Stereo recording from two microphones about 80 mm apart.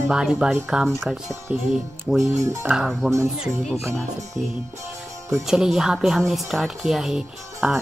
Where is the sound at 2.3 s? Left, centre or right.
Right.